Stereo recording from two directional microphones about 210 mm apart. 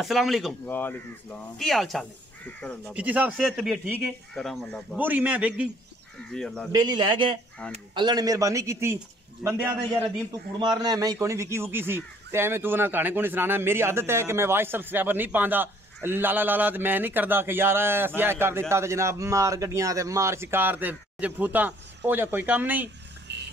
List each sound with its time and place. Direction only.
0.0 s a man's voice: centre (ahead or behind)
6.3 s speech: 5° left (ahead or behind)
6.7 s a man's voice: 20° right (ahead or behind)
10.6 s a man's voice: 20° right (ahead or behind)
23.3 s a sound: 55° right (ahead or behind)